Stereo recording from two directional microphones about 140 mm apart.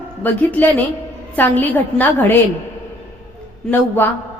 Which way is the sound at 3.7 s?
15° left (ahead or behind).